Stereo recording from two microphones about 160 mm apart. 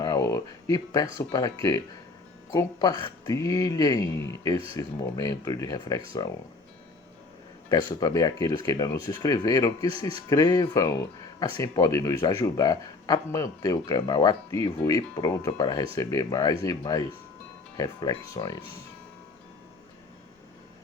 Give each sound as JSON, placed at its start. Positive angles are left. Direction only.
{"t": 0.0, "sound": "a man's voice", "side_deg": 20}
{"t": 7.7, "sound": "a man's voice", "side_deg": 25}